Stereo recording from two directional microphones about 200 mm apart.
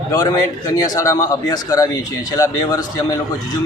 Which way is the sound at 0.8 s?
15° left (ahead or behind).